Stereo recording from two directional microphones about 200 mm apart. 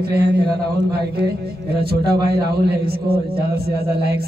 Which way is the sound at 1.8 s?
50° right (ahead or behind).